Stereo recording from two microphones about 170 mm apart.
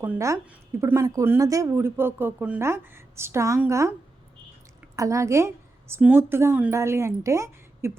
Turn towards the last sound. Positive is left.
turn(degrees=-15)  # may be behind; listen again after turning